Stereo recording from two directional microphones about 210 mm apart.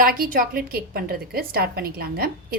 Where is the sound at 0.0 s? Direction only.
40° right (ahead or behind).